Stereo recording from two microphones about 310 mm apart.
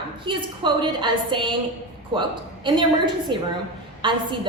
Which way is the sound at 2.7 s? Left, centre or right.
Centre.